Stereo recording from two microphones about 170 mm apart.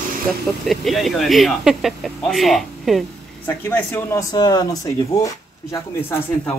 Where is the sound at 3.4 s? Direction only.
15° left (ahead or behind).